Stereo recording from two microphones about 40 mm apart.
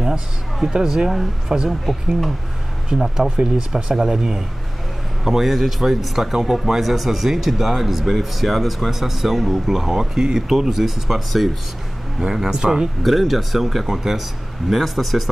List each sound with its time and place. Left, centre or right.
0.0 s speech: centre
1.9 s speech: centre
2.9 s speech: centre
12.4 s speech: centre
13.0 s speech: centre